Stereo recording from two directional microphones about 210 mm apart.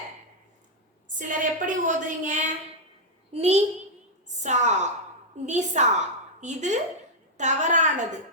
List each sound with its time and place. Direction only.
1.0 s a woman's voice: 40° right (ahead or behind)